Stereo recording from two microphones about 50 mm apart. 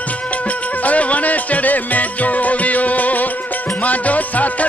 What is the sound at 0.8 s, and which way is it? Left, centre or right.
Music, left.